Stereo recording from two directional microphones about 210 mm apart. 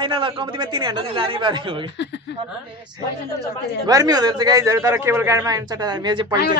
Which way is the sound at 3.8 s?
20° right (ahead or behind).